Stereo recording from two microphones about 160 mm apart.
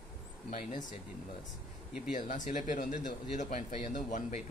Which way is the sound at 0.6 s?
50° left (ahead or behind).